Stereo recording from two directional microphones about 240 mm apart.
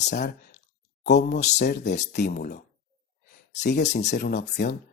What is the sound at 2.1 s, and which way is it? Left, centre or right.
Speech, left.